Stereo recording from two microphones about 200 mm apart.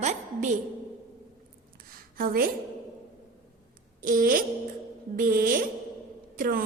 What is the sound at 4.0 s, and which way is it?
Music, 45° right (ahead or behind).